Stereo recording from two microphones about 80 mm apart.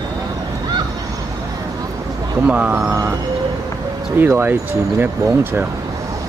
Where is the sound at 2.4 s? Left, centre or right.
Centre.